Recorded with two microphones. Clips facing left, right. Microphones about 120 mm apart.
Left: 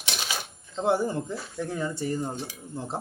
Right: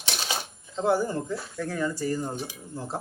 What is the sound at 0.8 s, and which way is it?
Speech, 25° left (ahead or behind).